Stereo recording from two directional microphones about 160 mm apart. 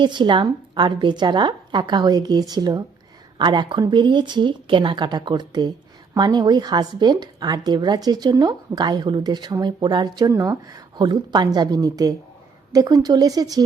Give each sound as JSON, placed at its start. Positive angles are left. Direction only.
{"t": 0.0, "sound": "speech", "side_deg": -30}